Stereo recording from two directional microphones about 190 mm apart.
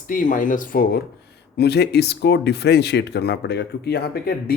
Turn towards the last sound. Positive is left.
turn(degrees=55)  # may be behind; listen again after turning